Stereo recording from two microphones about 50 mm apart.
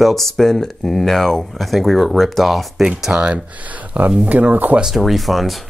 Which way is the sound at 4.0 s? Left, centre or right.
Right.